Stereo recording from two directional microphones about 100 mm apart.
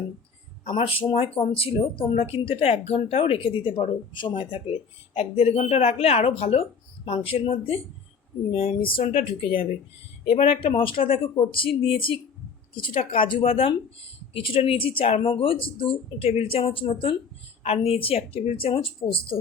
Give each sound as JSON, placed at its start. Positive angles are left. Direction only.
{"t": 0.7, "sound": "speech", "side_deg": 65}
{"t": 12.9, "sound": "speech", "side_deg": 90}
{"t": 14.3, "sound": "speech", "side_deg": 65}
{"t": 17.6, "sound": "speech", "side_deg": 85}